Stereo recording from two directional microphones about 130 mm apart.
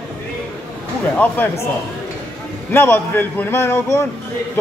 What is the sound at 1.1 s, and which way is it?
Speech, 15° left (ahead or behind).